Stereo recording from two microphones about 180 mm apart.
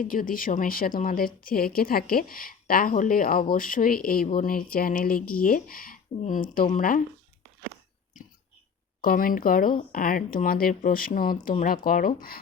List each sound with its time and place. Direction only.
0.0 s speech: 50° left (ahead or behind)
9.0 s speech: 50° left (ahead or behind)